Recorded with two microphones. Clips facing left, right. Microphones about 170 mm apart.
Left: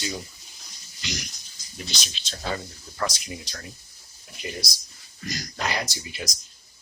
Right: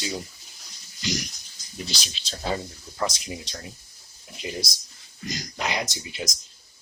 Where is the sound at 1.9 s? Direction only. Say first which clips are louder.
Right 1 dB; 30° right (ahead or behind).